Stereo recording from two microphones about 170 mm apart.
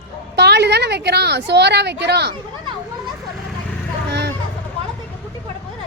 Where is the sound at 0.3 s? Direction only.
80° right.